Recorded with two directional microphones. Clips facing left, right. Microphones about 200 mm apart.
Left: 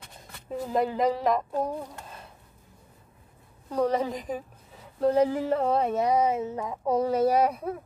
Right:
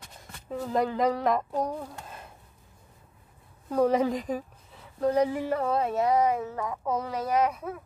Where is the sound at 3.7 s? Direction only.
10° right (ahead or behind).